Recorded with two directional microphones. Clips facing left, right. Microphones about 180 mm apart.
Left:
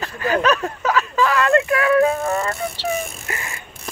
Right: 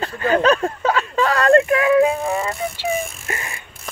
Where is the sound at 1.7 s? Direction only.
20° right (ahead or behind).